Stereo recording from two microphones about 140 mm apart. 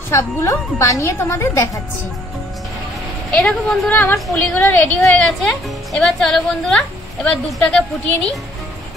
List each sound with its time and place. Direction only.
0.1 s a woman's voice: 20° left (ahead or behind)
3.3 s a woman's voice: 10° left (ahead or behind)
5.0 s a woman's voice: 5° left (ahead or behind)